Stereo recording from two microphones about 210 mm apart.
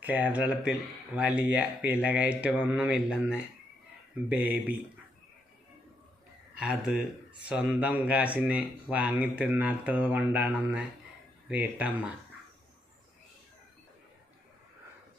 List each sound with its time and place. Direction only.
0.0 s speech: 10° right (ahead or behind)
6.6 s speech: 5° right (ahead or behind)